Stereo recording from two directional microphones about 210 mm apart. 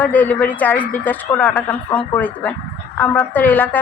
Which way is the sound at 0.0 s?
10° left (ahead or behind).